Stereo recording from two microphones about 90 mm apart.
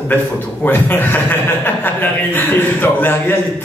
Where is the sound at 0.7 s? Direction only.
20° left (ahead or behind).